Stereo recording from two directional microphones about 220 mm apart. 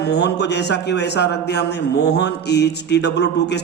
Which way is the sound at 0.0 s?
50° left (ahead or behind).